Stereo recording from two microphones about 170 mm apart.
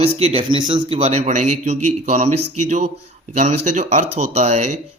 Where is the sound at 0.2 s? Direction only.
35° right (ahead or behind).